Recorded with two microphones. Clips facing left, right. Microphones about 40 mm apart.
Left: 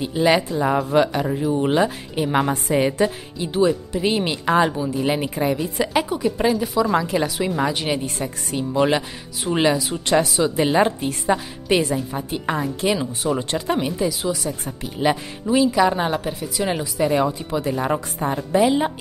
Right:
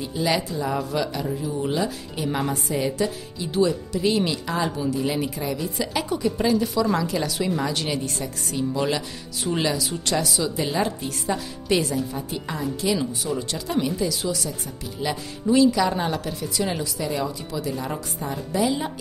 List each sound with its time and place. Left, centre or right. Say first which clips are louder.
0.0 s speech: left 6 dB; left
3.5 s speech: left 3 dB; left
4.7 s speech: left 1 dB; left
5.0 s speech: left 5 dB; left
6.0 s speech: left 2 dB; centre
14.8 s speech: left 8 dB; left
15.4 s speech: left 1 dB; left
17.0 s speech: left 10 dB; left